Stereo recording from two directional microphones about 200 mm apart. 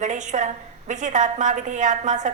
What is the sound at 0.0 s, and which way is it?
A woman's voice, 35° right (ahead or behind).